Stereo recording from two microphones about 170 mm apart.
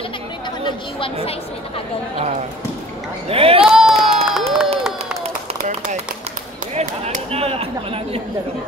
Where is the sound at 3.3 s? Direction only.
35° right (ahead or behind).